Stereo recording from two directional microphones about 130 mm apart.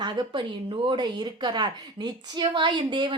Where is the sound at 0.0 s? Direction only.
35° right (ahead or behind).